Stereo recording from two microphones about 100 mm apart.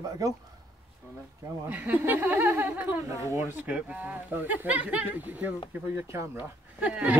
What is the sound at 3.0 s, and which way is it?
Speech, 30° right (ahead or behind).